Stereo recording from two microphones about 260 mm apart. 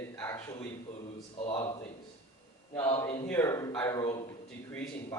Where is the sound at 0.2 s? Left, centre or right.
Centre.